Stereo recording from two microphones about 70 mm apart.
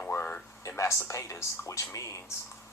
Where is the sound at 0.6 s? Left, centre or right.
Left.